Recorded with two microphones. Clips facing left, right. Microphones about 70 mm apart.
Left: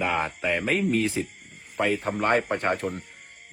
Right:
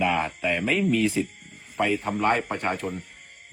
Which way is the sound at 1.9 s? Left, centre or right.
Left.